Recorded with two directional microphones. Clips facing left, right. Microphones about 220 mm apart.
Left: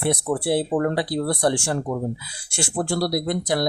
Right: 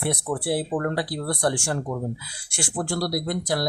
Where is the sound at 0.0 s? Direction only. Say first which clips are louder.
Left 4 dB; 25° left (ahead or behind).